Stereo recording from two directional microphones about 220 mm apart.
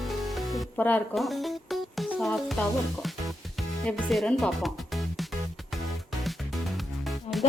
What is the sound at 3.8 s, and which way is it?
Speech, centre (ahead or behind).